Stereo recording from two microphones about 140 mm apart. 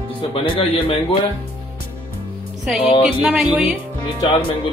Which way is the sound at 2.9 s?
40° left (ahead or behind).